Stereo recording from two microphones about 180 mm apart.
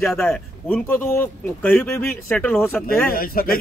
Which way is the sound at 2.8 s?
55° left (ahead or behind).